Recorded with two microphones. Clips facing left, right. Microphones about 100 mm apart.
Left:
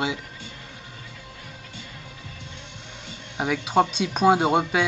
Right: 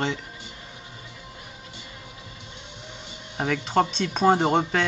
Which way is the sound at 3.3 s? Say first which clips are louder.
Left 1 dB; 10° left (ahead or behind).